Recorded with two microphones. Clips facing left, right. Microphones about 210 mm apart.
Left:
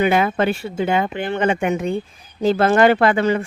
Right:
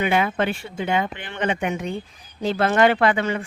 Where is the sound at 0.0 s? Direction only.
40° left (ahead or behind).